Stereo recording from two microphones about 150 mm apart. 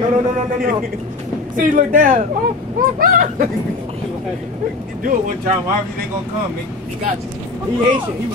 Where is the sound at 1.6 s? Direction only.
60° right (ahead or behind).